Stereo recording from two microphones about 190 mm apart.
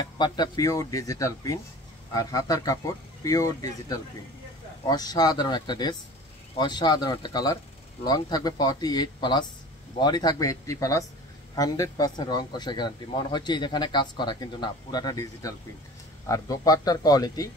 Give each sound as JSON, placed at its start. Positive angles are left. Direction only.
{"t": 0.2, "sound": "a man's voice", "side_deg": 20}